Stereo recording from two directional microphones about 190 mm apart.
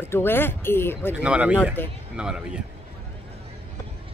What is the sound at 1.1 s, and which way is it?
Speech, 5° right (ahead or behind).